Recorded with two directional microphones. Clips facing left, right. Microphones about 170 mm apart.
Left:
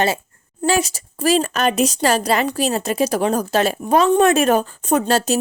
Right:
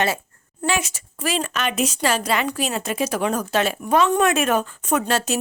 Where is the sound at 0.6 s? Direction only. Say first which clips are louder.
Left 5 dB; 35° left (ahead or behind).